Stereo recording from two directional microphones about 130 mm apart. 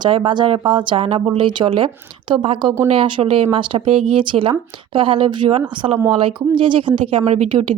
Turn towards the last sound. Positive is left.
turn(degrees=-55)  # may be behind; listen again after turning